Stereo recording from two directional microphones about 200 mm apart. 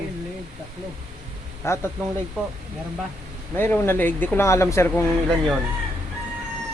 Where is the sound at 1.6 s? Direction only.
15° left (ahead or behind).